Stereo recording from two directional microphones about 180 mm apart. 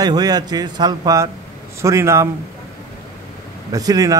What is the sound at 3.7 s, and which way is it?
Speech, 20° right (ahead or behind).